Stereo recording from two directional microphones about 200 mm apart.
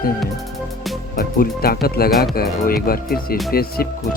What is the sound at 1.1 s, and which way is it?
Speech, 45° left (ahead or behind).